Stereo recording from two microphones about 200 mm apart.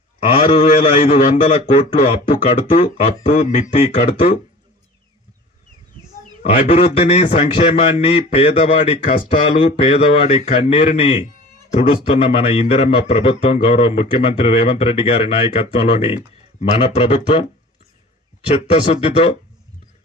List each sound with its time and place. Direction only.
0.3 s a man's voice: 30° left (ahead or behind)
6.4 s a man's voice: 30° left (ahead or behind)
16.6 s a man's voice: 30° left (ahead or behind)
18.5 s a man's voice: 30° left (ahead or behind)